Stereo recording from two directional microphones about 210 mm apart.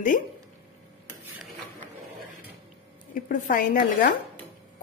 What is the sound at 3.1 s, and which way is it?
A woman's voice, 40° left (ahead or behind).